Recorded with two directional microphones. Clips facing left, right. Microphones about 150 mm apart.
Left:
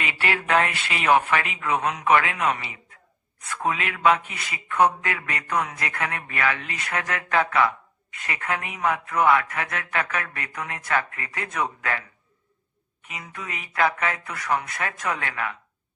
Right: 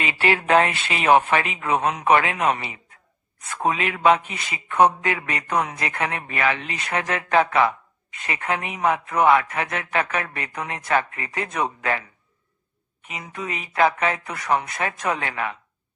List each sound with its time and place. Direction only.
0.0 s speech: 25° right (ahead or behind)